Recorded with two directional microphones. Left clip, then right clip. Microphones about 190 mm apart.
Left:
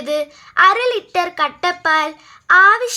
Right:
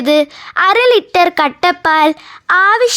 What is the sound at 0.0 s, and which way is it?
Speech, 50° right (ahead or behind).